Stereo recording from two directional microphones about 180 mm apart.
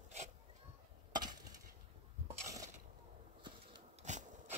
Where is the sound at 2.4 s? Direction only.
20° right (ahead or behind).